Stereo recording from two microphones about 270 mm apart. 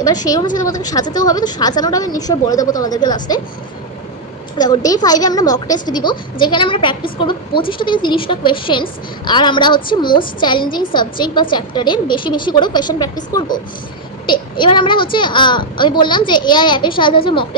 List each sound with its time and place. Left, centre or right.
0.0 s a woman's voice: centre
4.6 s a woman's voice: centre